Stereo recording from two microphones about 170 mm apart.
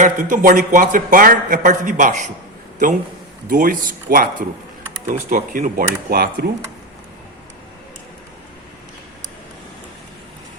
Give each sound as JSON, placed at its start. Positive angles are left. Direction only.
{"t": 0.0, "sound": "a man's voice", "side_deg": -50}
{"t": 3.5, "sound": "speech", "side_deg": -55}